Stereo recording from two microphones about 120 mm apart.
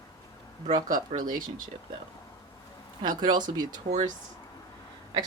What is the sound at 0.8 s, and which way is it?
Speech, 90° right.